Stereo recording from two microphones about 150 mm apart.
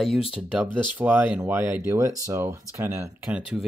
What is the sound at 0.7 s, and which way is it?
Speech, 10° right (ahead or behind).